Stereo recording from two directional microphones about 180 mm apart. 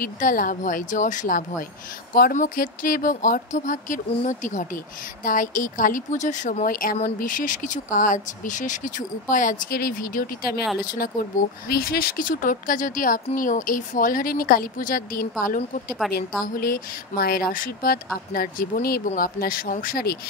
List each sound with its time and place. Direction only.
0.0 s a woman's voice: 50° left (ahead or behind)
11.7 s a woman's voice: 60° left (ahead or behind)